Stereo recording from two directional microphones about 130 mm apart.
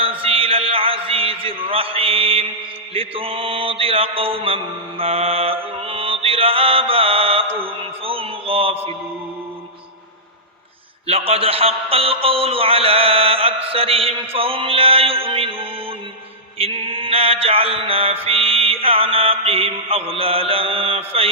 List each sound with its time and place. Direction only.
0.0 s a sound: 45° right (ahead or behind)
2.9 s mantra: 45° right (ahead or behind)
11.0 s mantra: 50° right (ahead or behind)